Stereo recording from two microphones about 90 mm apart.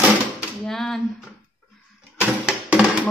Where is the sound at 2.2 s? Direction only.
10° right (ahead or behind).